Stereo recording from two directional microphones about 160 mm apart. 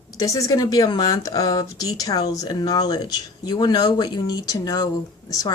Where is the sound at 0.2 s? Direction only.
20° left (ahead or behind).